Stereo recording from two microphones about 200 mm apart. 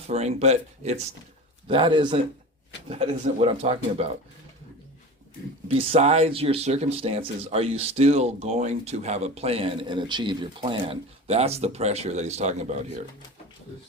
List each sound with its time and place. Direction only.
0.1 s a man's voice: 30° right (ahead or behind)
5.6 s speech: 30° right (ahead or behind)